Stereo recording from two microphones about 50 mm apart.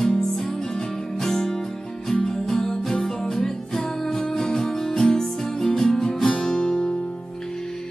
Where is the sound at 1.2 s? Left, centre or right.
Centre.